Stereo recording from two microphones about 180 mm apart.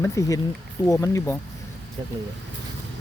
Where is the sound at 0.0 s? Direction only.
15° left (ahead or behind).